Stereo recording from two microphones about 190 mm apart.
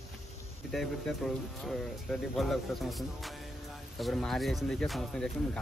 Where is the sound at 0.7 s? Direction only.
Centre (ahead or behind).